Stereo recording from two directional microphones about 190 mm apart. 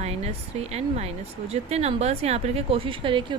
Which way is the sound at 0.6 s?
35° right (ahead or behind).